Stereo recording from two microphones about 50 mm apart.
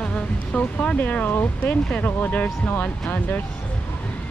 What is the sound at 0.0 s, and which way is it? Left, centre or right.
Speech, left.